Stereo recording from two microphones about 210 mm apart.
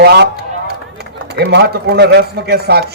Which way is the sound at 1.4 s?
50° right (ahead or behind).